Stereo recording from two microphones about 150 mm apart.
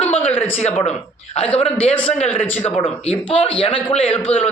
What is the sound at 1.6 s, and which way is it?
Speech, 45° left (ahead or behind).